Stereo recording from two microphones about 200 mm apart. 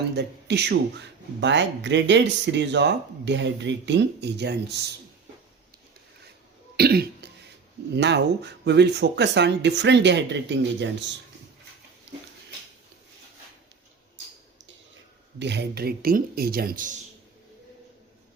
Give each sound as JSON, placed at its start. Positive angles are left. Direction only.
{"t": 0.2, "sound": "speech", "side_deg": -60}
{"t": 6.7, "sound": "speech", "side_deg": -50}
{"t": 15.4, "sound": "speech", "side_deg": -60}